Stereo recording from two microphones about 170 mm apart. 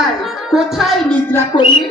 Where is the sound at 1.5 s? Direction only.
25° left (ahead or behind).